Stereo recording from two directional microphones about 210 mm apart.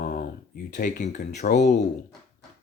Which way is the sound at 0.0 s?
40° left (ahead or behind).